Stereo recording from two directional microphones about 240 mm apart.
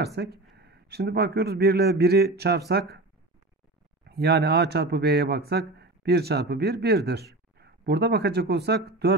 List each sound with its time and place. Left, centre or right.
0.0 s a man's voice: right
4.1 s a man's voice: right